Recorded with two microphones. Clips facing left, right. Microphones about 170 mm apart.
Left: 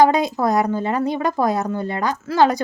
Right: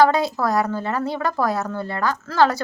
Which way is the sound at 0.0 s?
20° left (ahead or behind).